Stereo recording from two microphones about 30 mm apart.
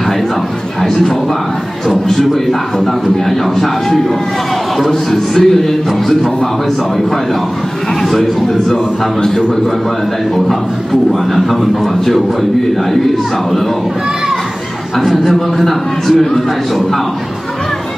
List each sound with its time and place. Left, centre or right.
0.8 s a man's voice: centre
2.8 s a man's voice: centre
5.1 s a man's voice: centre
8.0 s speech: centre
15.0 s a man's voice: centre